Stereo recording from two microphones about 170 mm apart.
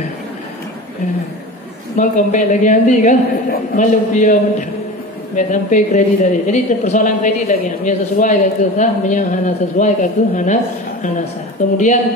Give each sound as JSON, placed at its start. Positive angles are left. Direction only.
{"t": 2.0, "sound": "speech", "side_deg": 50}